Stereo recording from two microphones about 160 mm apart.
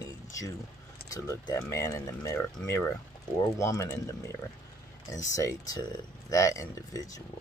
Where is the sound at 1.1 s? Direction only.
20° left (ahead or behind).